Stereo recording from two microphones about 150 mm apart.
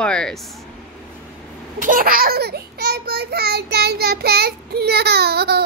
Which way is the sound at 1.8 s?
65° right (ahead or behind).